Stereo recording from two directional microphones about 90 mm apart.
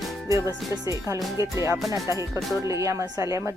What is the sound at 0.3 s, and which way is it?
Speech, 35° right (ahead or behind).